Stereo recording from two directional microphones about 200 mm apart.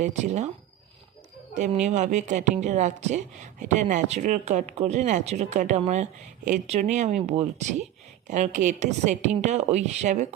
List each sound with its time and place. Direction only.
0.0 s a woman's voice: 35° right (ahead or behind)
1.5 s a woman's voice: 35° right (ahead or behind)